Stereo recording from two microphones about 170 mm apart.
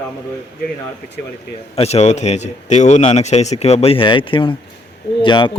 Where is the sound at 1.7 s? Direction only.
40° left (ahead or behind).